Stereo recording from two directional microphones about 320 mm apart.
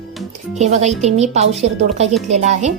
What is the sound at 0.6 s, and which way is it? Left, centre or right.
A woman's voice, right.